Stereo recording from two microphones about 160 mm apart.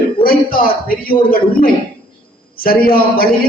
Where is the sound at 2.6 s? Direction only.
65° left (ahead or behind).